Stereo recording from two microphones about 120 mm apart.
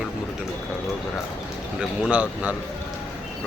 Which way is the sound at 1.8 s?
10° right (ahead or behind).